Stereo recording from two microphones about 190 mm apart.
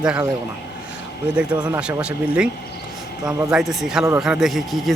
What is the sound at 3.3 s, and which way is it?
Speech, 15° right (ahead or behind).